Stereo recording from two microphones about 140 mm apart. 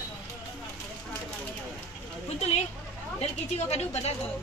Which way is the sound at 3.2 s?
50° left (ahead or behind).